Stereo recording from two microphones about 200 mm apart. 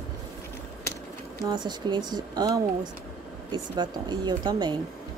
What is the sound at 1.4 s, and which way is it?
Speech, 20° right (ahead or behind).